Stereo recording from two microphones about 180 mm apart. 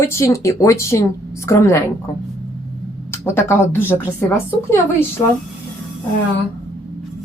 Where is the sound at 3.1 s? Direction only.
15° left (ahead or behind).